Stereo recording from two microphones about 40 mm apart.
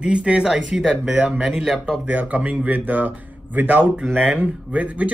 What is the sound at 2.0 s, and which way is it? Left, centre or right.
Speech, right.